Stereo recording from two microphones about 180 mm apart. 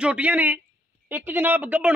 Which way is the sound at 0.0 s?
5° right (ahead or behind).